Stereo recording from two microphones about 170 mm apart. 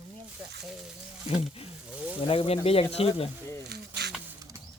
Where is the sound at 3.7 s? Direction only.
75° right (ahead or behind).